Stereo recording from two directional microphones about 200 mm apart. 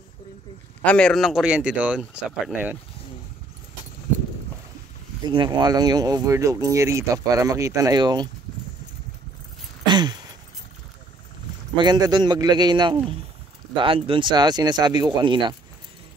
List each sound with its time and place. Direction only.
0.8 s speech: 5° left (ahead or behind)
5.2 s speech: 20° right (ahead or behind)
9.8 s a sound: 20° right (ahead or behind)
11.7 s speech: 20° right (ahead or behind)